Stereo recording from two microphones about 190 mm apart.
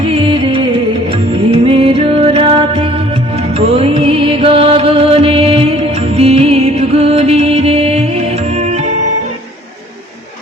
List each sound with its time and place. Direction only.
0.0 s music: 30° right (ahead or behind)
1.6 s music: 30° right (ahead or behind)